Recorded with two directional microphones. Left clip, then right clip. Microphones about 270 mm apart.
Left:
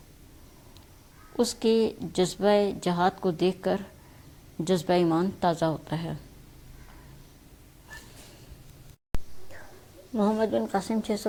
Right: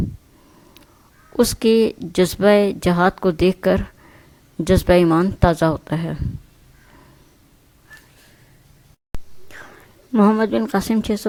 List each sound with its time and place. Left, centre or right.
1.5 s speech: right
2.9 s speech: right
3.3 s speech: right
5.1 s speech: right
5.9 s speech: right
9.1 s whispering: centre
10.2 s speech: right